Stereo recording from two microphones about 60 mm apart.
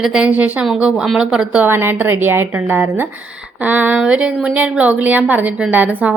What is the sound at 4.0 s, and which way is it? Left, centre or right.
A woman's voice, centre.